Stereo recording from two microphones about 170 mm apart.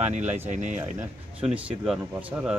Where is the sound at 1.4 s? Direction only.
5° right (ahead or behind).